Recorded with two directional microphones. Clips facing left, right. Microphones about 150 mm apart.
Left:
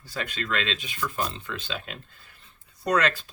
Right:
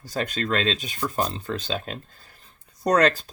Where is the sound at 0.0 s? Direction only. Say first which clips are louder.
Right 6 dB; 40° right (ahead or behind).